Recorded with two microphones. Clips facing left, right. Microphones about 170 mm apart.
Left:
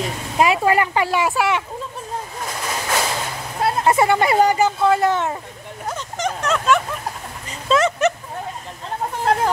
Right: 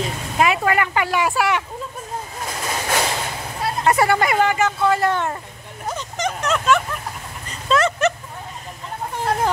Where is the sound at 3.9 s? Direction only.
20° left (ahead or behind).